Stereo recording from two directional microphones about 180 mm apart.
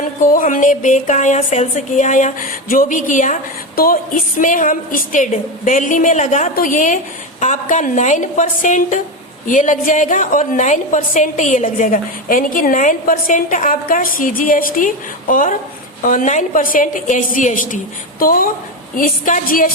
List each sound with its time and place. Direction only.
0.2 s a woman's voice: 45° left (ahead or behind)
4.4 s a woman's voice: 45° left (ahead or behind)